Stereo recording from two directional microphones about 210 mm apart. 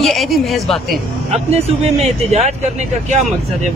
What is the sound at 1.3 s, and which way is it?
Speech, 30° right (ahead or behind).